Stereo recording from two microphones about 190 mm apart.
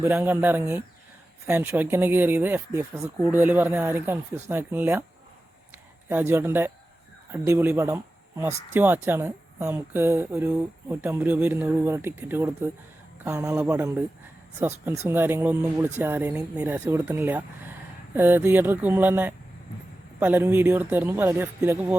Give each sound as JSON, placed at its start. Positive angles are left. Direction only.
{"t": 0.0, "sound": "speech", "side_deg": -10}
{"t": 6.1, "sound": "speech", "side_deg": -10}